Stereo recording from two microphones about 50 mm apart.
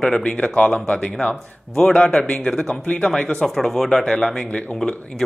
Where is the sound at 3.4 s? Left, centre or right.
Centre.